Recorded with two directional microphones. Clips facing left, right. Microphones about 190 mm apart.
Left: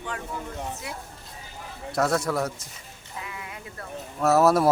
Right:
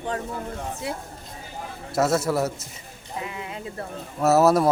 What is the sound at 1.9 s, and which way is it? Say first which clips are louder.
Speech: right 3 dB; 5° right (ahead or behind).